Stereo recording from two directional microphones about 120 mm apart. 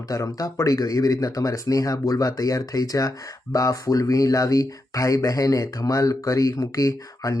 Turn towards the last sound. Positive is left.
turn(degrees=25)  # may be behind; listen again after turning